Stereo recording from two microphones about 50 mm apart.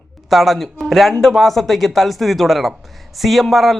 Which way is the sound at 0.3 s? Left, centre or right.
Centre.